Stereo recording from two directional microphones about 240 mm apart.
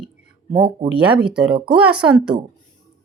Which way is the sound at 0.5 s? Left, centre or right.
Right.